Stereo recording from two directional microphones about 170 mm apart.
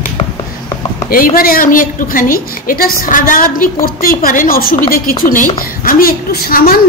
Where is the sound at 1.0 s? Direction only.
55° left (ahead or behind).